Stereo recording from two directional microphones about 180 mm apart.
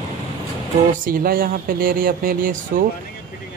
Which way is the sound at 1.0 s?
55° right (ahead or behind).